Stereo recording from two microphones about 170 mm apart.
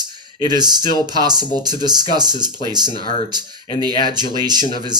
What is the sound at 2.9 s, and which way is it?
Speech, 30° left (ahead or behind).